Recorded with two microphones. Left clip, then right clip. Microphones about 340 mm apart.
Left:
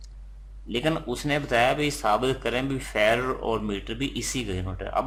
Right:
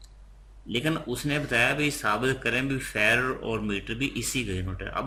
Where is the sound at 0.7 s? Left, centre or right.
Centre.